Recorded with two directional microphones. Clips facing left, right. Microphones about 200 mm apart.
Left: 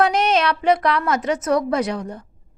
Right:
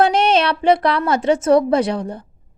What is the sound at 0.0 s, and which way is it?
A woman's voice, 30° right (ahead or behind).